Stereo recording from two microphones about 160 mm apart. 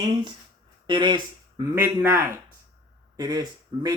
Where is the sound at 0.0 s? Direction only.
30° right (ahead or behind).